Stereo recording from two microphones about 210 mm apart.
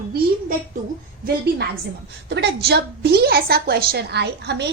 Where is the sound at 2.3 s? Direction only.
55° right (ahead or behind).